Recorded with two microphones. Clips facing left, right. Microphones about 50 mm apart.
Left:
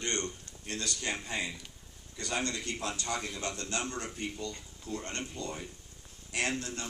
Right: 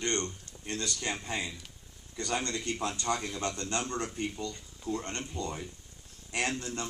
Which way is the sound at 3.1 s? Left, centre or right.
Centre.